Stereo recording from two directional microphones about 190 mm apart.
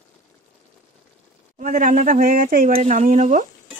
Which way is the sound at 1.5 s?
45° right (ahead or behind).